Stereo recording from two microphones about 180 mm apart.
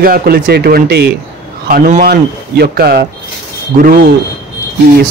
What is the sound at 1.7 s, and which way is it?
Speech, 50° right (ahead or behind).